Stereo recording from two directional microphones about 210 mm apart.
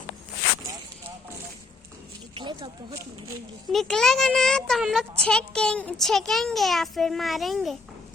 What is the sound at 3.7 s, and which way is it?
A child's voice, centre (ahead or behind).